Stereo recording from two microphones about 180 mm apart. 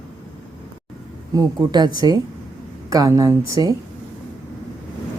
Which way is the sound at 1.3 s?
20° right (ahead or behind).